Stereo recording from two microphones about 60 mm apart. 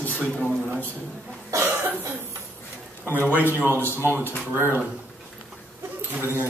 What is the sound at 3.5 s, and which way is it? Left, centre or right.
Speech, right.